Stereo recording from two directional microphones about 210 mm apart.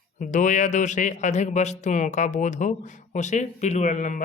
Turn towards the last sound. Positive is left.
turn(degrees=35)  # may be behind; listen again after turning